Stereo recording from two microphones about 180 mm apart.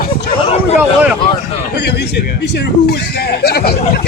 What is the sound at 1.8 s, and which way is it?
A man's voice, 70° left (ahead or behind).